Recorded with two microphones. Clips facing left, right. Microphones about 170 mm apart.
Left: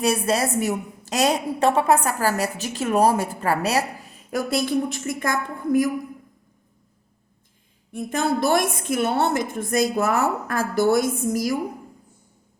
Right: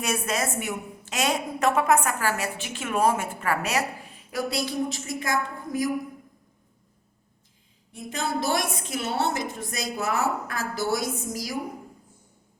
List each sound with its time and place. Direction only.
0.0 s a woman's voice: 35° left (ahead or behind); by 5.9 s 55° left (ahead or behind)
7.9 s a woman's voice: 55° left (ahead or behind)